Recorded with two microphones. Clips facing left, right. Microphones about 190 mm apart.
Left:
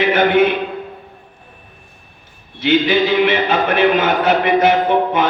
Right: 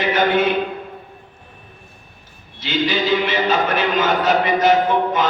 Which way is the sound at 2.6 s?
60° left (ahead or behind).